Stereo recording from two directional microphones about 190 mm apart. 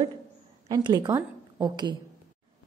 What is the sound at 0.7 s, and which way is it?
A woman's voice, 20° right (ahead or behind).